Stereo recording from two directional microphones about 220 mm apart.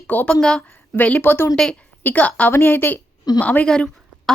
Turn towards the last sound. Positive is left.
turn(degrees=5)  # may be behind; listen again after turning